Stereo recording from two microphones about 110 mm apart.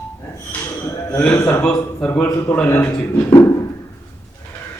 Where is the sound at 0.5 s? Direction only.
10° left (ahead or behind).